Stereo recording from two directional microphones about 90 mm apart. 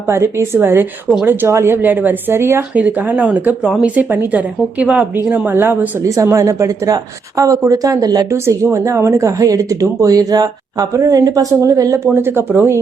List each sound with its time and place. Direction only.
0.1 s a woman's voice: 30° right (ahead or behind)
2.7 s a woman's voice: 15° right (ahead or behind)
6.0 s a woman's voice: 35° right (ahead or behind)
8.3 s a woman's voice: 30° right (ahead or behind)
12.1 s a woman's voice: 25° right (ahead or behind)